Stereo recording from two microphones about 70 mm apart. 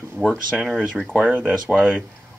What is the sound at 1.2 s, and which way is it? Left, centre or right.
Speech, right.